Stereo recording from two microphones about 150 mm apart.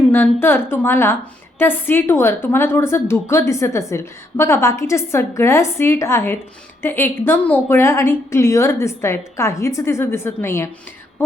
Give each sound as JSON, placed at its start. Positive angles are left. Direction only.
{"t": 0.1, "sound": "a woman's voice", "side_deg": 15}